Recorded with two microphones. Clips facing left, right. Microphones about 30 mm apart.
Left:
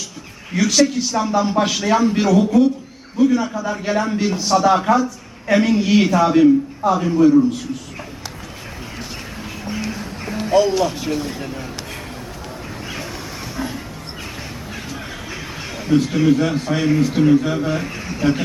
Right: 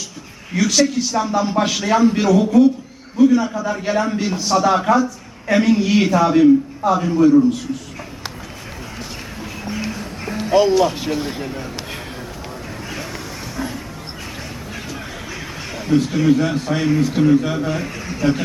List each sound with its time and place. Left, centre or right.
0.5 s a man's voice: centre
9.0 s vehicle: centre
9.9 s music: centre
11.2 s speech: right
13.6 s a sound: centre
14.8 s a man's voice: centre
18.0 s a sound: centre